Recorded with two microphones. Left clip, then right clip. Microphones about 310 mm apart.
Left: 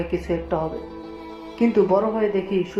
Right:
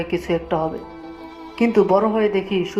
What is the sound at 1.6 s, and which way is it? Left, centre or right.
Speech, centre.